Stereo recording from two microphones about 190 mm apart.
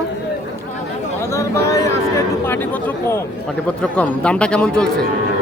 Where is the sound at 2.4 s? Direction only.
10° left (ahead or behind).